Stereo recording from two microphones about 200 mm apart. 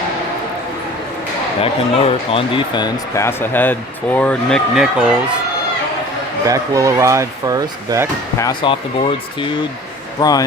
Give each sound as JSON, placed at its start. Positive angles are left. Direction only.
{"t": 1.6, "sound": "speech", "side_deg": 30}
{"t": 6.5, "sound": "speech", "side_deg": -15}
{"t": 8.4, "sound": "speech", "side_deg": 20}